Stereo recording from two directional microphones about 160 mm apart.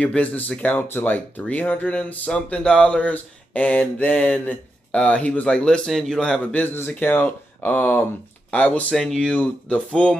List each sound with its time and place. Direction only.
0.0 s speech: 10° left (ahead or behind)